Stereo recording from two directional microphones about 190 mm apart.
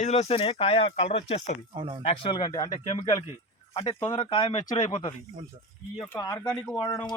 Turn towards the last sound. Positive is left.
turn(degrees=20)  # may be behind; listen again after turning